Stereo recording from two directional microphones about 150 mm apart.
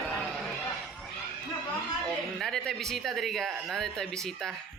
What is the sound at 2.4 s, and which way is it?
Speech, centre (ahead or behind).